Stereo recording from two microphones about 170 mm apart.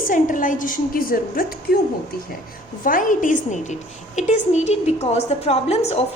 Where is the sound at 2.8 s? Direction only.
50° left (ahead or behind).